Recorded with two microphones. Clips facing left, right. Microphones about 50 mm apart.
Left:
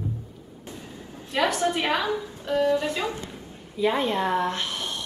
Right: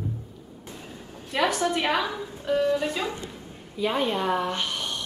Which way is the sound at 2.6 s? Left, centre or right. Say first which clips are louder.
Left 3 dB; left.